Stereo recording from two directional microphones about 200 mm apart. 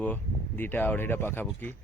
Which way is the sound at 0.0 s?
10° left (ahead or behind).